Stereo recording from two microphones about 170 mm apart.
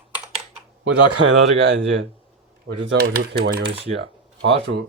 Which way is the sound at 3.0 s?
65° right (ahead or behind).